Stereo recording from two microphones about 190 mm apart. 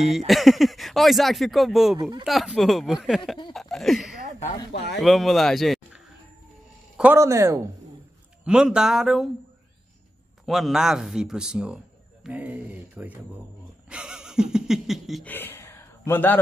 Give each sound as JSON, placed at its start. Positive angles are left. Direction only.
{"t": 0.3, "sound": "speech", "side_deg": 0}
{"t": 2.0, "sound": "speech", "side_deg": -20}
{"t": 2.2, "sound": "speech", "side_deg": 0}
{"t": 7.0, "sound": "speech", "side_deg": -15}
{"t": 8.5, "sound": "speech", "side_deg": -5}
{"t": 10.4, "sound": "speech", "side_deg": 0}
{"t": 13.8, "sound": "a sound", "side_deg": -5}
{"t": 15.3, "sound": "a sound", "side_deg": 10}